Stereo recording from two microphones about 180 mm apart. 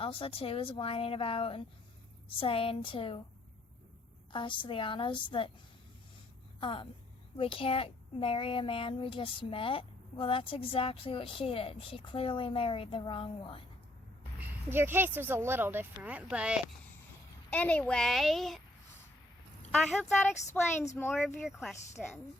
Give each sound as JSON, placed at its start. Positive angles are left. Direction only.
{"t": 0.0, "sound": "speech", "side_deg": 30}
{"t": 4.3, "sound": "speech", "side_deg": 25}
{"t": 6.6, "sound": "speech", "side_deg": 30}
{"t": 14.4, "sound": "a woman's voice", "side_deg": -10}
{"t": 17.5, "sound": "a woman's voice", "side_deg": 5}
{"t": 19.7, "sound": "a woman's voice", "side_deg": 0}
{"t": 20.5, "sound": "speech", "side_deg": 15}
{"t": 21.4, "sound": "a woman's voice", "side_deg": 0}